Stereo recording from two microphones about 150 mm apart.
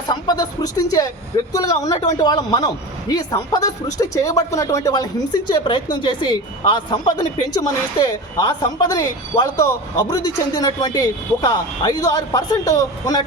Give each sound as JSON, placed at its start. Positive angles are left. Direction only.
{"t": 0.1, "sound": "speech", "side_deg": 25}